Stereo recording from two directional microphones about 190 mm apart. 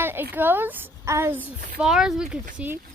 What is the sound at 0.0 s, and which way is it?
A woman's voice, 10° right (ahead or behind).